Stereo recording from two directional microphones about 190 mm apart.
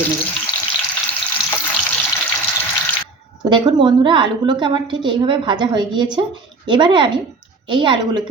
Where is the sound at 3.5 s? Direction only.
25° right (ahead or behind).